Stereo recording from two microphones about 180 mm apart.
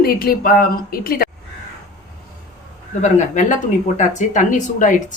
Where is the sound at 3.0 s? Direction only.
45° left (ahead or behind).